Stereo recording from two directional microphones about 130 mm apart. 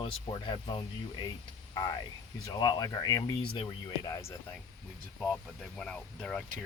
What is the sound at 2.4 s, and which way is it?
Speech, 30° left (ahead or behind).